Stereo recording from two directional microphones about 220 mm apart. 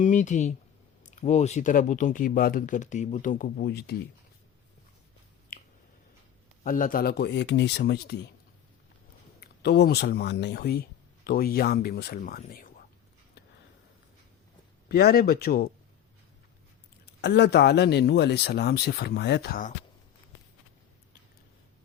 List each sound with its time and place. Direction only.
0.0 s speech: 35° left (ahead or behind)
5.5 s finger snapping: 40° left (ahead or behind)
6.7 s speech: 40° left (ahead or behind)
9.4 s speech: 45° left (ahead or behind)
14.8 s speech: 45° left (ahead or behind)
17.2 s speech: 50° left (ahead or behind)